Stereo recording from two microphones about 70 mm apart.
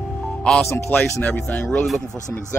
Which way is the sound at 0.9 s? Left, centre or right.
Left.